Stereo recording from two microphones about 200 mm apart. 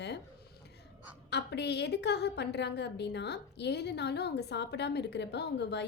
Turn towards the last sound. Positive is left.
turn(degrees=60)  # may be behind; listen again after turning